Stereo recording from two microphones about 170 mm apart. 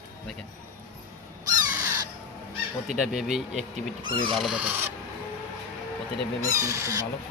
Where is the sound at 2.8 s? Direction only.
Centre (ahead or behind).